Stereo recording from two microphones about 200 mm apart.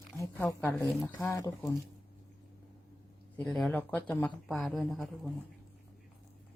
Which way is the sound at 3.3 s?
5° left (ahead or behind).